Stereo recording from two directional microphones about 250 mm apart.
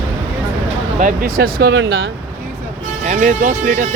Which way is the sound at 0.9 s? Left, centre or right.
Right.